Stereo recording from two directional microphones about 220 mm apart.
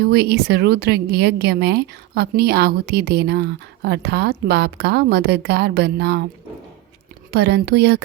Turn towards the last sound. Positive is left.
turn(degrees=-50)  # may be behind; listen again after turning